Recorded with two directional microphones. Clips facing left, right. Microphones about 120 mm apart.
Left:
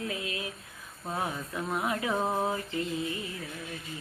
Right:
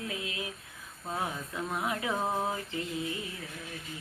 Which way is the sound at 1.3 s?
15° left (ahead or behind).